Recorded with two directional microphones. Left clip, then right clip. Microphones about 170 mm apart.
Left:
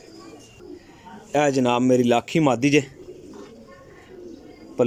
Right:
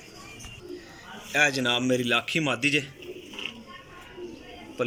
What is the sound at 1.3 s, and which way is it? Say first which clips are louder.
A man's voice: left 4 dB; 40° left (ahead or behind).